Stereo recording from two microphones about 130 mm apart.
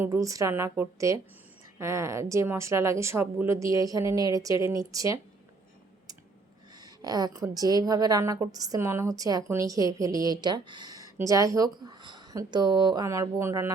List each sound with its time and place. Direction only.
0.0 s a woman's voice: 25° right (ahead or behind)
6.7 s a woman's voice: 30° right (ahead or behind)